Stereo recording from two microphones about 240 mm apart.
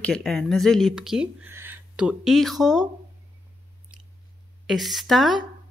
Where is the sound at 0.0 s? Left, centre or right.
Centre.